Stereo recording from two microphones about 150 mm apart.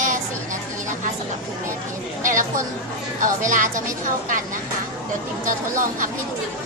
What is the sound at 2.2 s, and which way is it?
Chatter, 60° right (ahead or behind).